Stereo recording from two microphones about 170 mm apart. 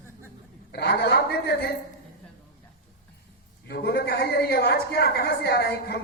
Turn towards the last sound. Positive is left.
turn(degrees=70)  # may be behind; listen again after turning